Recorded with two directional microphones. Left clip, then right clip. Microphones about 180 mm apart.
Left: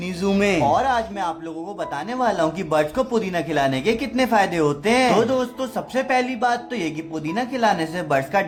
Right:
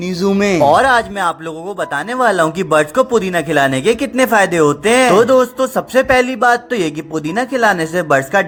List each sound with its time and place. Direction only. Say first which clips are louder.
0.3 s speech: right 8 dB; 30° right (ahead or behind)